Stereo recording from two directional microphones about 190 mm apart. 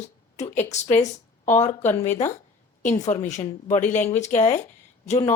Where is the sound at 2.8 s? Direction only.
40° left (ahead or behind).